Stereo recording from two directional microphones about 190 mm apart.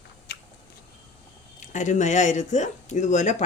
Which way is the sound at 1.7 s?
40° left (ahead or behind).